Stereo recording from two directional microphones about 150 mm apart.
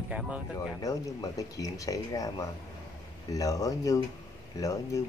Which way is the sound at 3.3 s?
20° left (ahead or behind).